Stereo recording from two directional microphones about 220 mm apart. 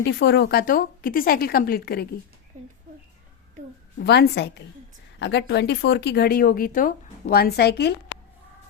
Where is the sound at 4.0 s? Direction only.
50° left (ahead or behind).